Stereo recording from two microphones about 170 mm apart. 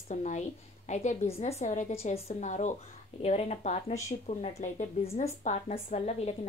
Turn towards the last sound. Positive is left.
turn(degrees=40)  # may be behind; listen again after turning